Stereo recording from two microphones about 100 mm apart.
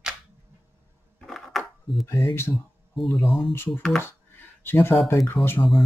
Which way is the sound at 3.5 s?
25° left (ahead or behind).